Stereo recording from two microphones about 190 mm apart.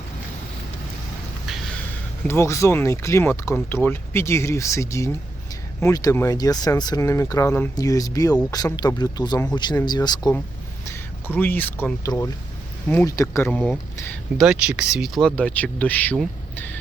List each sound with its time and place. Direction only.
2.2 s speech: 15° left (ahead or behind)
10.8 s speech: 10° left (ahead or behind)
14.4 s speech: 5° right (ahead or behind)